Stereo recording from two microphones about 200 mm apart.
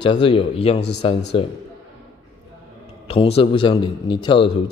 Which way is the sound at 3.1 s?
30° left (ahead or behind).